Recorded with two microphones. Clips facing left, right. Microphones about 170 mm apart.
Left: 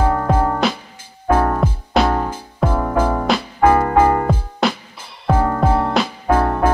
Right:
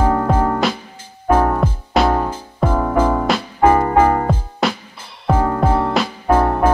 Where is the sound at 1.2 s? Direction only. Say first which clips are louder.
Right 1 dB; 10° right (ahead or behind).